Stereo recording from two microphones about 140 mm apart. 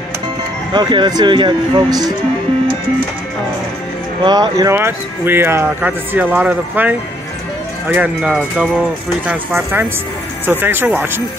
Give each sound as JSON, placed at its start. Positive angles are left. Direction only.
{"t": 0.7, "sound": "speech", "side_deg": -30}
{"t": 4.2, "sound": "speech", "side_deg": -30}
{"t": 4.7, "sound": "speech", "side_deg": -15}